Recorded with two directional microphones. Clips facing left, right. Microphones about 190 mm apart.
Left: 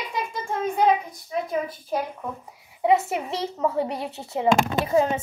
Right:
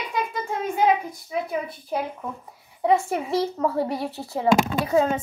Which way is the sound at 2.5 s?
5° left (ahead or behind).